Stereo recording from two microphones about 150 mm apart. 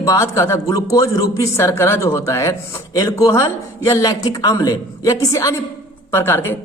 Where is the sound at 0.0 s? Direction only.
20° left (ahead or behind).